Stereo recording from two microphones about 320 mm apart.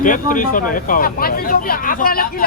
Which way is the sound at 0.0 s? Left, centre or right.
Left.